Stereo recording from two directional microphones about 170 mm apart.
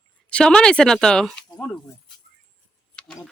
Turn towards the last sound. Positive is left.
turn(degrees=0)  # may be behind; listen again after turning